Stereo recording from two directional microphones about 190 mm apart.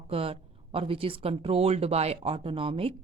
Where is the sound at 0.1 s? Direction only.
30° right (ahead or behind).